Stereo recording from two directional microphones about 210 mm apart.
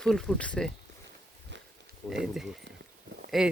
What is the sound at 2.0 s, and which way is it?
Speech, 5° left (ahead or behind).